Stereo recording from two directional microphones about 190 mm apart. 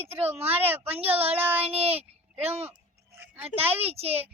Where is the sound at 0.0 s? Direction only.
35° right (ahead or behind).